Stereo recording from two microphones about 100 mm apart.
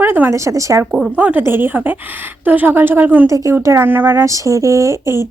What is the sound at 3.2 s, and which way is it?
Speech, 30° right (ahead or behind).